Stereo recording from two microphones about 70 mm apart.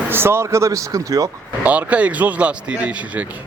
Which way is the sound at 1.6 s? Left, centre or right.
Right.